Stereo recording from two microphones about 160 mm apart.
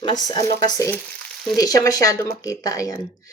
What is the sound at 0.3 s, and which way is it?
Speech, 25° left (ahead or behind).